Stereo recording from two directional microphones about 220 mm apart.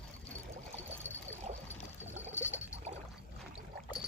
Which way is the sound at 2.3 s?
10° left (ahead or behind).